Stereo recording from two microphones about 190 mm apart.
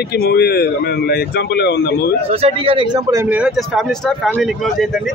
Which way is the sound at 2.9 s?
20° right (ahead or behind).